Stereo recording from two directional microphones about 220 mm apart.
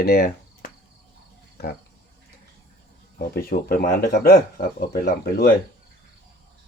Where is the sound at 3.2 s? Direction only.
40° left (ahead or behind).